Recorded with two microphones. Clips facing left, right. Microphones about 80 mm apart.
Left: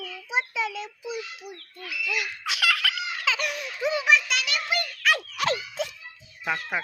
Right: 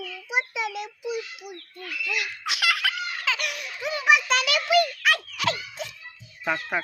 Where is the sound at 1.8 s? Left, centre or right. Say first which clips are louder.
Even; centre.